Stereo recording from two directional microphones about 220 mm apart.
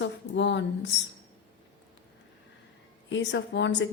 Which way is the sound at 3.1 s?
55° left (ahead or behind).